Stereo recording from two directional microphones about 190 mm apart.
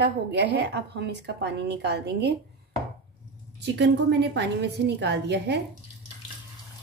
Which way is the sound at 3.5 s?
65° right (ahead or behind).